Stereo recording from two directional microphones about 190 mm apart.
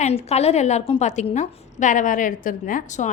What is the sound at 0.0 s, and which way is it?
A woman's voice, 35° left (ahead or behind).